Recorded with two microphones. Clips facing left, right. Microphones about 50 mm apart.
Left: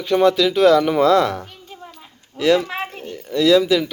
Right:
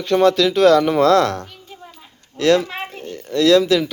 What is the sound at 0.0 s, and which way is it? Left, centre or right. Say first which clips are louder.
Speech: right 1 dB; centre.